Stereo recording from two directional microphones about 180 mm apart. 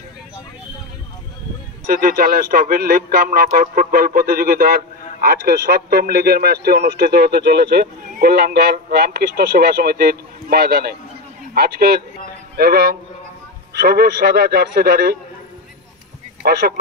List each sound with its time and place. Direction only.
1.9 s speech: 55° right (ahead or behind)
16.4 s speech: 60° right (ahead or behind)